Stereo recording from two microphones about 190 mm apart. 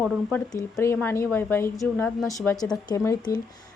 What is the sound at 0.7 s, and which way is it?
A woman's voice, 15° left (ahead or behind).